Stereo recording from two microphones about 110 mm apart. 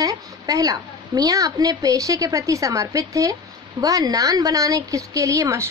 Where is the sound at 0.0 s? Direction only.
35° right (ahead or behind).